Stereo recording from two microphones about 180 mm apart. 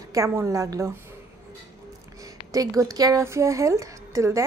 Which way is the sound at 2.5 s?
20° right (ahead or behind).